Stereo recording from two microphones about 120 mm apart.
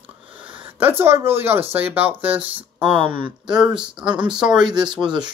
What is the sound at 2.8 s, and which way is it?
Speech, 45° right (ahead or behind).